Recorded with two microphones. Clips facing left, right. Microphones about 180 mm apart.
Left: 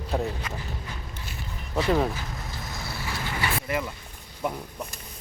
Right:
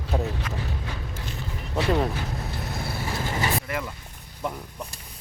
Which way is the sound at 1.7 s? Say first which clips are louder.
Even; centre (ahead or behind).